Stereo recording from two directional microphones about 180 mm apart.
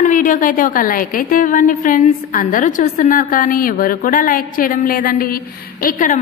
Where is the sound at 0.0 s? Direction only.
45° left (ahead or behind).